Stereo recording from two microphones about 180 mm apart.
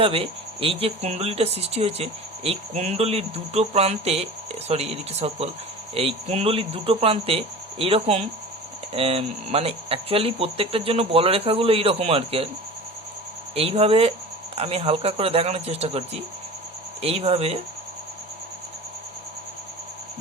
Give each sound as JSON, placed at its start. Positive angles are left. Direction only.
{"t": 0.0, "sound": "speech", "side_deg": -30}
{"t": 13.6, "sound": "speech", "side_deg": -35}